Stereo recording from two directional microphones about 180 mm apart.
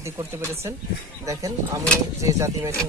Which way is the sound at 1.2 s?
20° right (ahead or behind).